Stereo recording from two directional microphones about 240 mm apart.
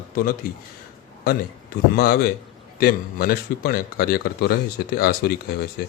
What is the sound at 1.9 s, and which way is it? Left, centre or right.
Speech, left.